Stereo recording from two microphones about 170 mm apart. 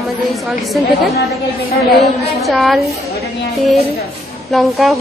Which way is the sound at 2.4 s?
Centre (ahead or behind).